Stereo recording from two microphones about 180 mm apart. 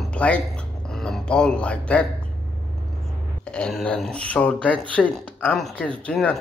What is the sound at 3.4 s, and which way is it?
Speech, 5° left (ahead or behind).